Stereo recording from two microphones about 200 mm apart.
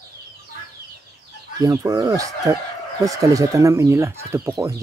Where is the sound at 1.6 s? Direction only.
15° right (ahead or behind).